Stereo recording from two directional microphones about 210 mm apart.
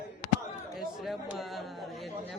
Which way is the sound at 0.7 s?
Centre (ahead or behind).